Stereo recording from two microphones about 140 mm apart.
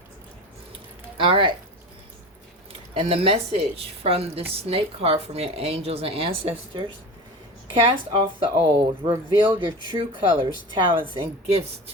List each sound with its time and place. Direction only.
1.2 s speech: 40° right (ahead or behind)
2.9 s speech: 45° right (ahead or behind)